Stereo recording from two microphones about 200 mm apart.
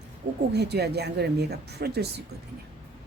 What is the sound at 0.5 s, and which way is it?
Speech, 55° right (ahead or behind).